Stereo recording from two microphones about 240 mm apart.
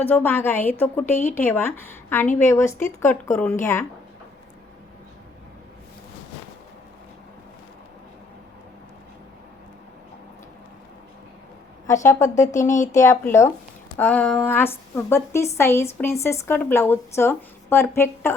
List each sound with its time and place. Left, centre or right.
0.0 s a woman's voice: centre
1.1 s speech: left
1.4 s a woman's voice: centre
12.5 s speech: left
13.0 s a woman's voice: centre